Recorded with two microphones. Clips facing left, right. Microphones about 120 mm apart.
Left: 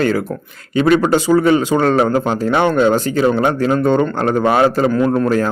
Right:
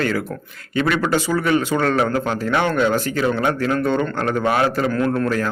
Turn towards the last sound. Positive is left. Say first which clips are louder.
# left 5 dB
turn(degrees=30)  # may be behind; listen again after turning